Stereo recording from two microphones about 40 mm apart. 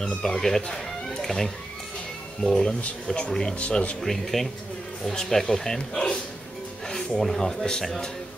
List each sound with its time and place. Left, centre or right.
0.2 s speech: centre
4.0 s speech: centre
7.2 s speech: centre